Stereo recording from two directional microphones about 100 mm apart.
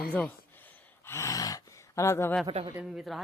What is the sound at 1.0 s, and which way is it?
Gasp, 25° left (ahead or behind).